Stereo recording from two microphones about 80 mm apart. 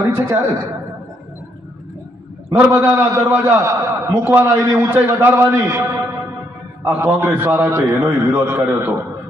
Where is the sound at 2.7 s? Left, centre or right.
Right.